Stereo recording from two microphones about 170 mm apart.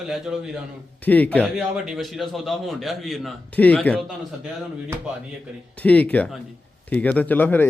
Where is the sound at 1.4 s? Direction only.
5° right (ahead or behind).